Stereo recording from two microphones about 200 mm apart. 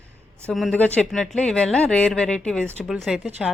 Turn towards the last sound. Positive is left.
turn(degrees=-5)  # may be behind; listen again after turning